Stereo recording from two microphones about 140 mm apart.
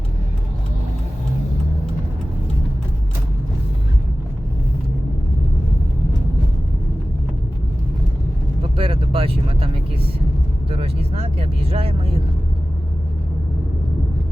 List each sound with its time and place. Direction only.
8.7 s vehicle: 40° right (ahead or behind)
10.7 s vehicle: 45° right (ahead or behind)